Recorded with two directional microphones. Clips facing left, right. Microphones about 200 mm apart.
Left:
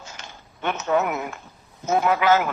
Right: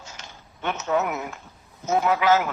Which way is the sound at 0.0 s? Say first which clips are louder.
Left 2 dB; 55° left (ahead or behind).